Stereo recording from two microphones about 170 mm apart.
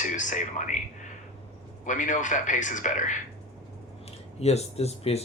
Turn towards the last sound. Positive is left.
turn(degrees=40)  # may be behind; listen again after turning